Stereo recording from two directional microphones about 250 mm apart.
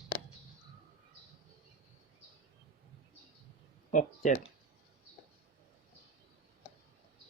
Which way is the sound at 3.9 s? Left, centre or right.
Left.